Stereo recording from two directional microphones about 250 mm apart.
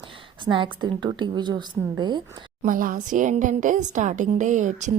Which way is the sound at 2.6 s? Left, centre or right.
Right.